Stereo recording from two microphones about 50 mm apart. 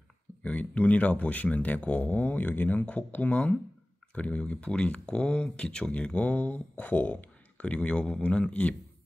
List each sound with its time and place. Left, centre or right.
0.4 s speech: left